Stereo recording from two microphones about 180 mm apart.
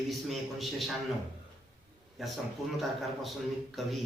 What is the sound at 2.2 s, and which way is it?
A woman's voice, centre (ahead or behind).